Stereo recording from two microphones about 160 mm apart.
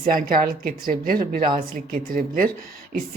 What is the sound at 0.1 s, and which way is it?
Speech, 60° right (ahead or behind).